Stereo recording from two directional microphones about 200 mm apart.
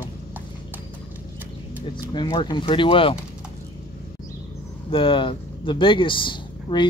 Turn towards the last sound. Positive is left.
turn(degrees=25)  # may be behind; listen again after turning